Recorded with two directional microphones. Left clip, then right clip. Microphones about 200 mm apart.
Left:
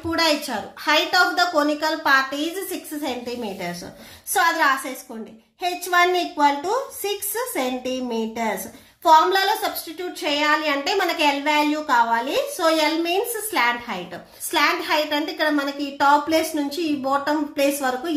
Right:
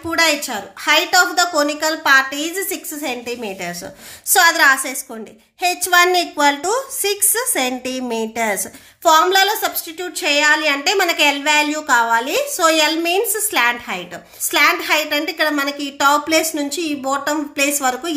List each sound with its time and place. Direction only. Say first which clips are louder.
0.2 s a woman's voice: right 5 dB; 20° right (ahead or behind)
4.3 s a woman's voice: right 6 dB; 35° right (ahead or behind)